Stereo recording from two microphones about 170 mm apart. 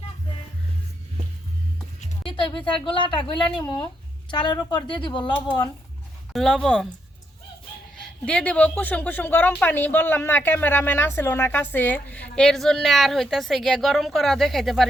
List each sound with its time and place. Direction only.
2.2 s a sound: 30° left (ahead or behind)
2.7 s speech: 30° left (ahead or behind)
4.3 s speech: 25° left (ahead or behind)
6.3 s speech: centre (ahead or behind)
8.2 s speech: 5° left (ahead or behind)